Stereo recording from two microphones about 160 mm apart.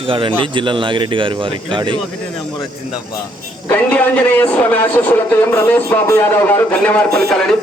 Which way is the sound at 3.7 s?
10° left (ahead or behind).